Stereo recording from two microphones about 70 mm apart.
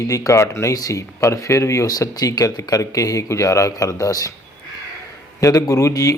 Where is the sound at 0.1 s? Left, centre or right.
Left.